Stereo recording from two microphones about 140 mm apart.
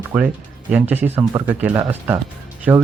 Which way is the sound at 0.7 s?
15° right (ahead or behind).